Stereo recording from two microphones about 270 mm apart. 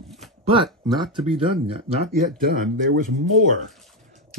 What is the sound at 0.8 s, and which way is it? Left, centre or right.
Speech, centre.